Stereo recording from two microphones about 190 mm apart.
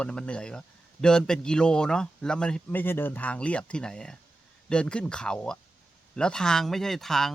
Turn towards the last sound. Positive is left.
turn(degrees=0)  # may be behind; listen again after turning